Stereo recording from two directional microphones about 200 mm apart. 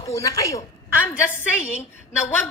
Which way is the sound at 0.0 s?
15° left (ahead or behind).